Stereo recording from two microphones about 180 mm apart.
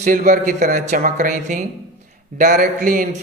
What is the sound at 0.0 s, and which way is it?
Speech, 45° right (ahead or behind).